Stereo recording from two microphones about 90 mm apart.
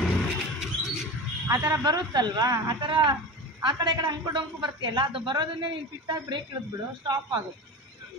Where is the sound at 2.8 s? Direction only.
60° right (ahead or behind).